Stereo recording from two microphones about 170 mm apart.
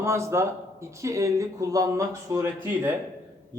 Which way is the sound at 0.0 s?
15° right (ahead or behind).